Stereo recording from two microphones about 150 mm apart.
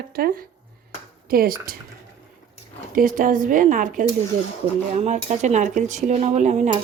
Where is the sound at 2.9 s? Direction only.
65° right (ahead or behind).